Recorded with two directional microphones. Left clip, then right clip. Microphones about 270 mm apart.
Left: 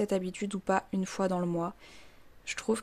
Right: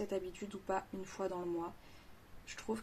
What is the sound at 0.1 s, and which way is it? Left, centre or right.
Speech, left.